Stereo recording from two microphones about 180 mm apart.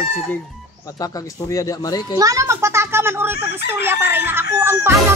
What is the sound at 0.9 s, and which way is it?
Speech, 20° left (ahead or behind).